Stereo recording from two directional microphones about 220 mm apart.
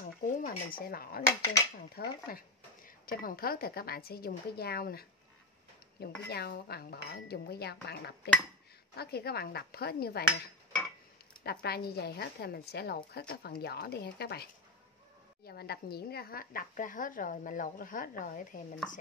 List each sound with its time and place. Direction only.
0.0 s a woman's voice: 40° left (ahead or behind)
11.4 s a woman's voice: 45° left (ahead or behind)